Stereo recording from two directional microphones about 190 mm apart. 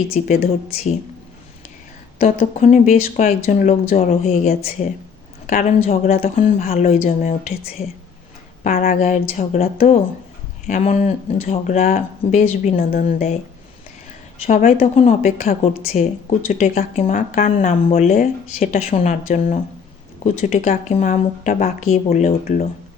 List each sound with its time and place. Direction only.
0.1 s speech: 40° left (ahead or behind)
2.1 s speech: 45° left (ahead or behind)
5.5 s speech: 40° left (ahead or behind)
6.0 s speech: 50° left (ahead or behind)
6.7 s speech: 35° left (ahead or behind)
7.0 s speech: 45° left (ahead or behind)
14.4 s speech: 40° left (ahead or behind)